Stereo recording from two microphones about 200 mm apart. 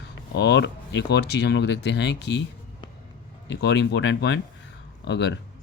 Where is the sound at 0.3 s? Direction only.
60° left (ahead or behind).